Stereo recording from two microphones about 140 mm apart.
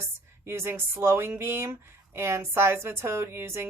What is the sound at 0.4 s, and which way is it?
A woman's voice, 15° right (ahead or behind).